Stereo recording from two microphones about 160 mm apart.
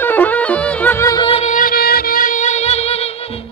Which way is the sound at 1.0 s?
25° left (ahead or behind).